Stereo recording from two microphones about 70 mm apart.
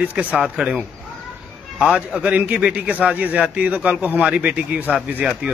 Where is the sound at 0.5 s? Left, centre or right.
Centre.